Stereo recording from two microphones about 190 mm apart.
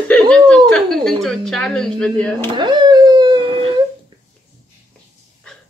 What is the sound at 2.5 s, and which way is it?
Howl, 25° right (ahead or behind).